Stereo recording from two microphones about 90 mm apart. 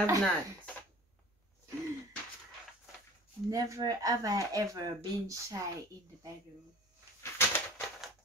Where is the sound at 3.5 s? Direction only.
45° right (ahead or behind).